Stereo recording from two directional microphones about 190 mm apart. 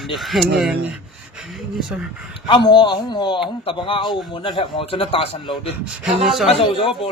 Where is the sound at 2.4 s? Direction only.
25° left (ahead or behind).